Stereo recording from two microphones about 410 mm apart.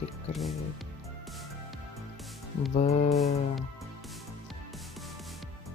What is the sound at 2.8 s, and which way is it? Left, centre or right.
Speech, centre.